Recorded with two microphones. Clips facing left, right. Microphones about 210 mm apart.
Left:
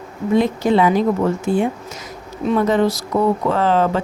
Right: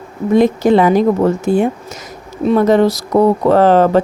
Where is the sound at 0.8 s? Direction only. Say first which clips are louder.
Right 3 dB; 45° right (ahead or behind).